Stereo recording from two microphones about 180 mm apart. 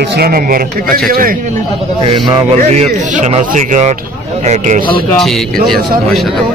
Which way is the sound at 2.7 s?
40° right (ahead or behind).